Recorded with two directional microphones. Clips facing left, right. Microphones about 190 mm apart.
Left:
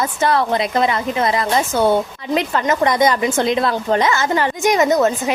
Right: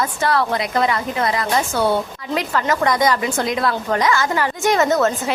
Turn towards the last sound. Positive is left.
turn(degrees=15)  # may be behind; listen again after turning